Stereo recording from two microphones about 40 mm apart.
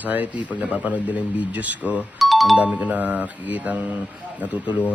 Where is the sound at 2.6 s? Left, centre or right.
Right.